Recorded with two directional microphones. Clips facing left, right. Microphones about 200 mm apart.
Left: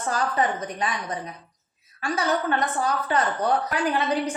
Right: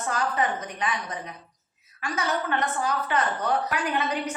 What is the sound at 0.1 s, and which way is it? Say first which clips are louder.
Speech: left 2 dB; 35° left (ahead or behind).